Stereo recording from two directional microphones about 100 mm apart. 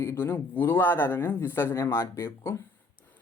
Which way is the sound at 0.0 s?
25° left (ahead or behind).